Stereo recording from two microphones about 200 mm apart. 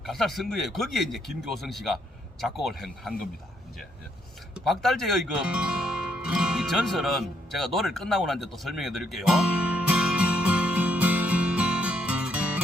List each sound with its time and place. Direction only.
0.0 s speech: centre (ahead or behind)
4.5 s music: centre (ahead or behind)